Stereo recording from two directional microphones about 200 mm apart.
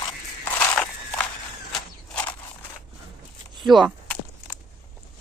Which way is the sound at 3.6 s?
Centre (ahead or behind).